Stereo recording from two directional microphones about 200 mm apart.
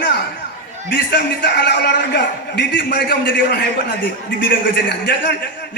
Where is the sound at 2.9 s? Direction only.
45° left (ahead or behind).